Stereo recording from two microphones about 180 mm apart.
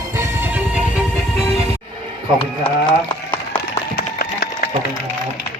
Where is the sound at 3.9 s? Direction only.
55° left (ahead or behind).